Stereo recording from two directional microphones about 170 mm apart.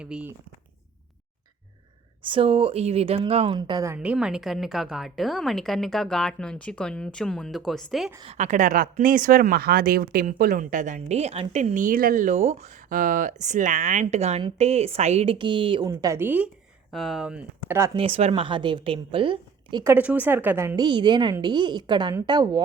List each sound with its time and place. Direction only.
0.0 s speech: 5° right (ahead or behind)
2.2 s a woman's voice: 30° right (ahead or behind)
3.9 s a woman's voice: 10° right (ahead or behind)
8.2 s a woman's voice: 40° right (ahead or behind); by 16.5 s 10° right (ahead or behind)
16.9 s speech: centre (ahead or behind)
17.9 s a woman's voice: 30° right (ahead or behind)
19.8 s speech: 10° right (ahead or behind)
20.7 s a woman's voice: 25° right (ahead or behind)